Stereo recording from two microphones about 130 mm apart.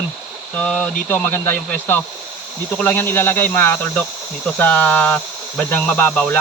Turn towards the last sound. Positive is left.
turn(degrees=15)  # may be behind; listen again after turning